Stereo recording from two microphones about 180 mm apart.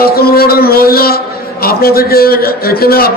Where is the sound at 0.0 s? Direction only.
60° left (ahead or behind).